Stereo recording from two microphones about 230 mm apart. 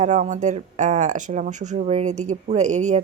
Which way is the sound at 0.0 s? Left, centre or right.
Right.